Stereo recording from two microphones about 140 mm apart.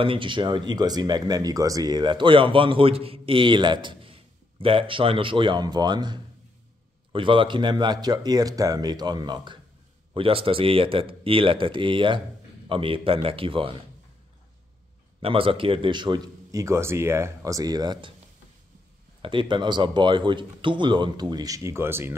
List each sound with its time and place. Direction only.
0.0 s speech: 35° right (ahead or behind)
15.1 s speech: 40° right (ahead or behind)
19.2 s speech: 35° right (ahead or behind); by 22.1 s 15° right (ahead or behind)